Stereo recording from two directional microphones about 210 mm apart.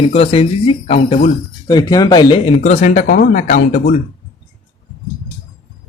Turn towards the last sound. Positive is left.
turn(degrees=40)  # may be behind; listen again after turning